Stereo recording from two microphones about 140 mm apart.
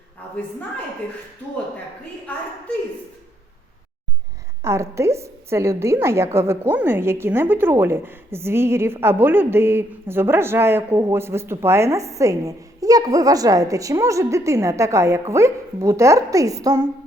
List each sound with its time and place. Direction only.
4.6 s a woman's voice: 20° right (ahead or behind)